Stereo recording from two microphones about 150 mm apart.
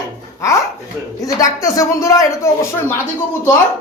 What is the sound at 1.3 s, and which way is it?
Speech, 20° left (ahead or behind).